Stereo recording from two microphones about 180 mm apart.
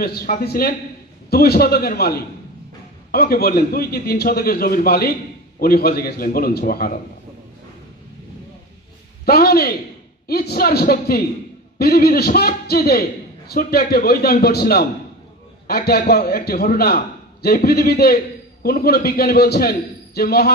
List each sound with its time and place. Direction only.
0.0 s a man's voice: 60° left (ahead or behind)
9.2 s a man's voice: 60° left (ahead or behind)